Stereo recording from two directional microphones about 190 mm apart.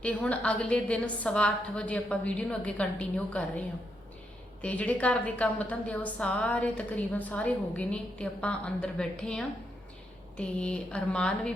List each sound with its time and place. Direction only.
0.0 s a woman's voice: 5° left (ahead or behind)